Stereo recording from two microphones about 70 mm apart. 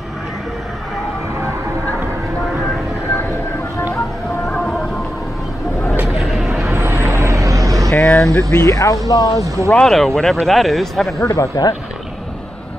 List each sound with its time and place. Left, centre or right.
4.5 s a sound: centre
6.0 s a sound: centre
6.7 s vehicle: right
7.9 s vehicle: left
8.2 s speech: centre
8.5 s speech: left
9.7 s speech: centre
11.1 s speech: left